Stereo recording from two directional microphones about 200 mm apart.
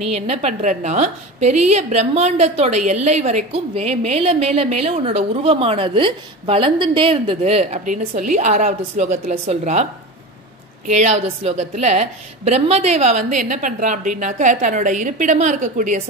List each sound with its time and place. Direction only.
0.1 s a woman's voice: 30° right (ahead or behind)
10.9 s a woman's voice: 35° right (ahead or behind)